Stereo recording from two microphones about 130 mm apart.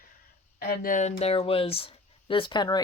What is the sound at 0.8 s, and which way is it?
Speech, 85° left.